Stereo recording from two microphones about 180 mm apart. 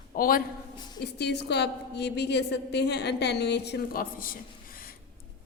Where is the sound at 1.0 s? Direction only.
65° left (ahead or behind).